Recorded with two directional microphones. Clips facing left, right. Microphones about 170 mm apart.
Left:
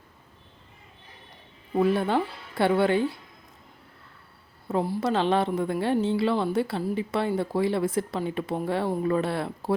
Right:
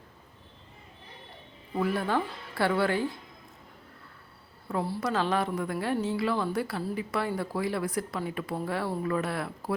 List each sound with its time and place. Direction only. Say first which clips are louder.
1.7 s speech: left 5 dB; 25° left (ahead or behind)
4.7 s a woman's voice: left 4 dB; 15° left (ahead or behind)
4.9 s speech: left 4 dB; 25° left (ahead or behind)